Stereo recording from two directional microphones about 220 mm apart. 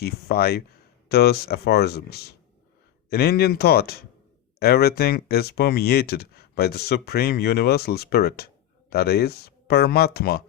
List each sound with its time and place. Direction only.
0.0 s speech: 45° left (ahead or behind)